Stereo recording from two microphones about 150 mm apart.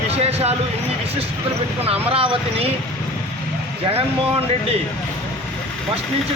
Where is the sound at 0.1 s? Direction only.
45° right (ahead or behind).